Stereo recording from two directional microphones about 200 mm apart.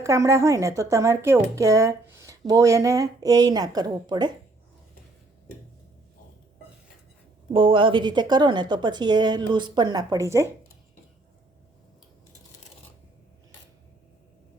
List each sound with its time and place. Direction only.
0.0 s a woman's voice: 15° right (ahead or behind)
7.5 s a woman's voice: 25° right (ahead or behind)